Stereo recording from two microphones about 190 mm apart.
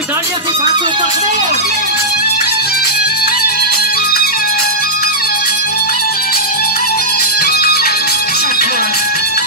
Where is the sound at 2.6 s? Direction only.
55° left (ahead or behind).